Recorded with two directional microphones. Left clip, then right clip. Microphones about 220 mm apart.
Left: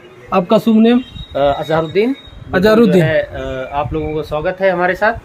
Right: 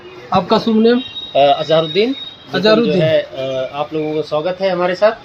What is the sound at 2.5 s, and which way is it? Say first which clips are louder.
Speech: left 2 dB; 55° left (ahead or behind).